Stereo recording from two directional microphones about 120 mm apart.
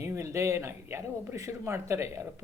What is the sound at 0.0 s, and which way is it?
Speech, 20° right (ahead or behind).